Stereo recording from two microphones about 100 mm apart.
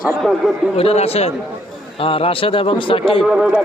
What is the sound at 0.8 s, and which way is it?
Speech, 85° left.